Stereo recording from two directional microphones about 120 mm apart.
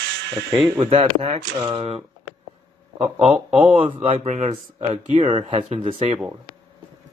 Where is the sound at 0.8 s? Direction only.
50° right (ahead or behind).